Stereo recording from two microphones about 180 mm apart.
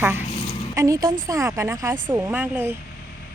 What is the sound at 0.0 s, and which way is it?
A woman's voice, 10° right (ahead or behind).